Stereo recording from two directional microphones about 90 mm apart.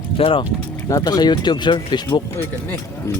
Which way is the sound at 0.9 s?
45° left (ahead or behind).